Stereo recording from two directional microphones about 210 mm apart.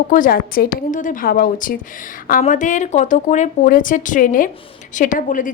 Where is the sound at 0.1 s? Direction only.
40° left (ahead or behind).